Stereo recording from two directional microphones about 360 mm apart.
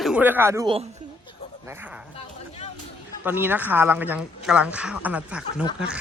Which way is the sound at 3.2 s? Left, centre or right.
Centre.